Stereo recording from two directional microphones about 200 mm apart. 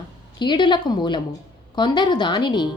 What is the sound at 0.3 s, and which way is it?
Speech, 20° left (ahead or behind).